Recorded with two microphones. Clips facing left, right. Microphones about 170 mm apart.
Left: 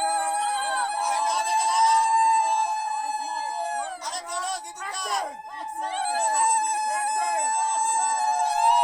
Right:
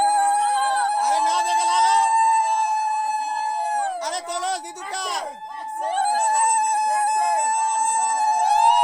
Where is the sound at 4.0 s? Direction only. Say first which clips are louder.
Right 6 dB; 80° right.